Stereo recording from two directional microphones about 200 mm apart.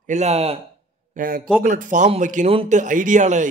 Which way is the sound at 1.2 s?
45° right (ahead or behind).